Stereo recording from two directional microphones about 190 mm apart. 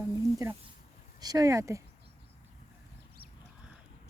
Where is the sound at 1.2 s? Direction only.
20° right (ahead or behind).